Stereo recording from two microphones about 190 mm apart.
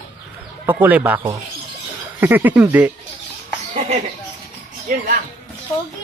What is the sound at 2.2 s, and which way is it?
Speech, 10° right (ahead or behind).